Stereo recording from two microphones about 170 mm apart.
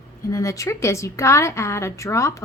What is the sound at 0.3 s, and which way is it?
A woman's voice, 20° left (ahead or behind).